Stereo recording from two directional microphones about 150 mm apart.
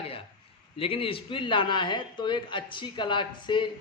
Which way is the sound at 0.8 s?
40° left (ahead or behind).